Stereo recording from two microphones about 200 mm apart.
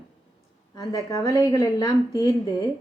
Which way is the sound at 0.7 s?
15° left (ahead or behind).